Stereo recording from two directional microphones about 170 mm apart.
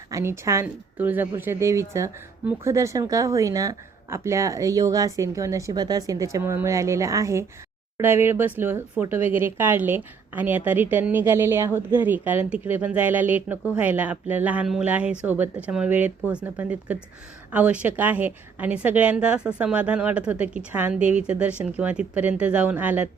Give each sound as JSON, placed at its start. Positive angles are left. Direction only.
{"t": 0.1, "sound": "speech", "side_deg": -15}